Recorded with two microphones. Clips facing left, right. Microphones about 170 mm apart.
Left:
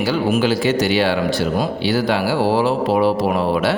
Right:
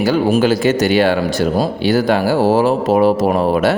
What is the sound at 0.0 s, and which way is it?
Speech, 40° right (ahead or behind).